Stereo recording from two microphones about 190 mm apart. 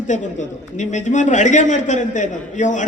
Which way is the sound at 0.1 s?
40° left (ahead or behind).